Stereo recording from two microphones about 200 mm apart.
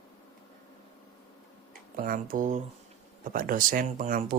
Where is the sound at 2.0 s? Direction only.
45° right (ahead or behind).